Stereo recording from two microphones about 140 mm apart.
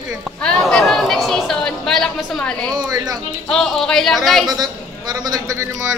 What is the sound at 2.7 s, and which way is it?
Speech, 25° right (ahead or behind).